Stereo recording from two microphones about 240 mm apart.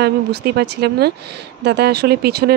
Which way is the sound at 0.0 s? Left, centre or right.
Right.